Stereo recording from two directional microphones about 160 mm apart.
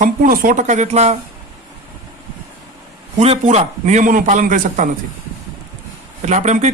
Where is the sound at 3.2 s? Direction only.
40° right (ahead or behind).